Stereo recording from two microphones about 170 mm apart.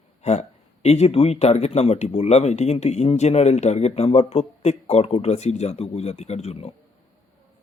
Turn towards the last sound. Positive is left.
turn(degrees=35)  # may be behind; listen again after turning